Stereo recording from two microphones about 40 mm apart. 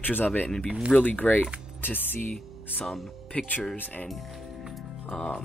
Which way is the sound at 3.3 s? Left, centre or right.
Left.